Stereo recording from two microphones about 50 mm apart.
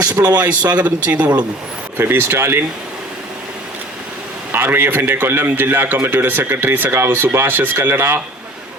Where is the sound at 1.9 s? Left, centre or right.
Right.